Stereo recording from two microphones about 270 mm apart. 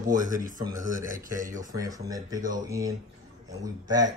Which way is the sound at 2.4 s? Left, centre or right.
Right.